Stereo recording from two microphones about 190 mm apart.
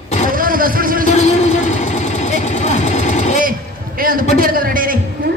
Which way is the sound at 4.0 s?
50° right (ahead or behind).